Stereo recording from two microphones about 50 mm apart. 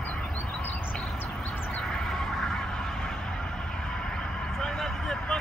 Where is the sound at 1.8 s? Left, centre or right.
Centre.